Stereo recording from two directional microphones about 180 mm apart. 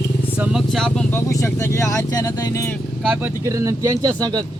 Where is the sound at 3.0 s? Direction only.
5° right (ahead or behind).